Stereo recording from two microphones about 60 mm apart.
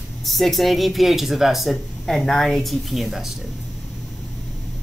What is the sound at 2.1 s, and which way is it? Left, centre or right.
Speech, centre.